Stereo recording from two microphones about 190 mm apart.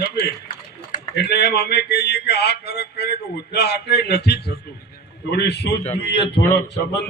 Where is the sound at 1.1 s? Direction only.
60° left (ahead or behind).